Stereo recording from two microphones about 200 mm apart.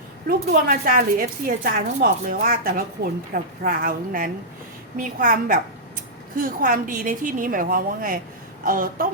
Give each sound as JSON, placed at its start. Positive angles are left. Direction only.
{"t": 0.3, "sound": "a woman's voice", "side_deg": -45}